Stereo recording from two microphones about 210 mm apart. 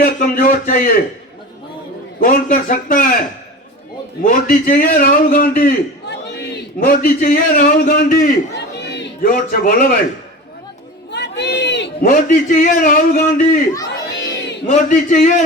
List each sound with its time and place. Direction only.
0.0 s a man's voice: 45° left (ahead or behind)
2.1 s a man's voice: 40° left (ahead or behind)
4.2 s a man's voice: 40° left (ahead or behind)
11.1 s a sound: 55° left (ahead or behind)
12.0 s a man's voice: 40° left (ahead or behind)
13.9 s crowd: 55° left (ahead or behind)
14.7 s a man's voice: 35° left (ahead or behind)